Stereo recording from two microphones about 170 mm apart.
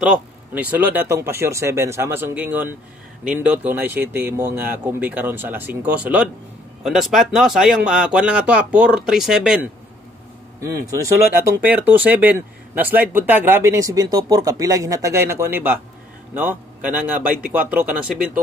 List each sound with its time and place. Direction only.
0.0 s speech: 5° right (ahead or behind)
10.6 s a man's voice: 20° right (ahead or behind)